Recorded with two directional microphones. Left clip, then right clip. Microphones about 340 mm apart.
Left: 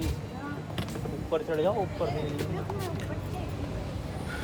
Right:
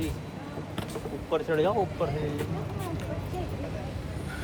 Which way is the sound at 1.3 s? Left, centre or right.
Right.